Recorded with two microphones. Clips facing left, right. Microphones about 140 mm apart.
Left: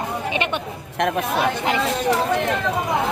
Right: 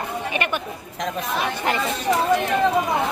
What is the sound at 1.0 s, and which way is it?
Speech, 65° left (ahead or behind).